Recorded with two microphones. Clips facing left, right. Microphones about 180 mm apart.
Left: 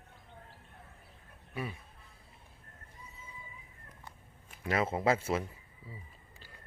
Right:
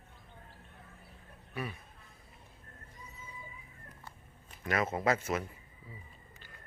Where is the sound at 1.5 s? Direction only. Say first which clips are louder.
Even; 20° left (ahead or behind).